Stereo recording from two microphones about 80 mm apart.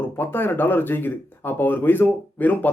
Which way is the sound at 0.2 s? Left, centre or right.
Left.